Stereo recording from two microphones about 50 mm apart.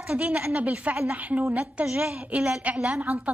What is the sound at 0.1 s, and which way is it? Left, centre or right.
A woman's voice, right.